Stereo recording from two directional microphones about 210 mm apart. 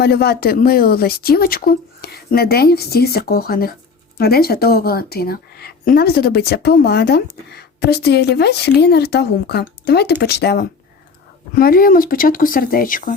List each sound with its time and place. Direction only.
0.0 s speech: 50° left (ahead or behind)